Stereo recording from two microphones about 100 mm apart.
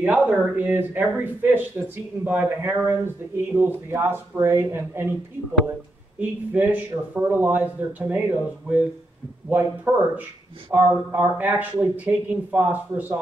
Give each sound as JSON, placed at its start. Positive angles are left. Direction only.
{"t": 0.0, "sound": "a sound", "side_deg": -15}
{"t": 0.6, "sound": "speech", "side_deg": -15}
{"t": 6.1, "sound": "speech", "side_deg": -15}